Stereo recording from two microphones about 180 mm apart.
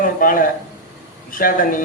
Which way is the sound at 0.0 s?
50° left (ahead or behind).